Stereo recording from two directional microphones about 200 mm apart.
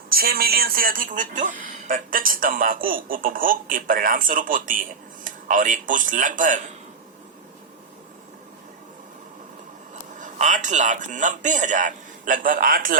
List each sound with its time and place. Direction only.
0.1 s speech: 50° right (ahead or behind)
10.2 s a man's voice: 40° right (ahead or behind)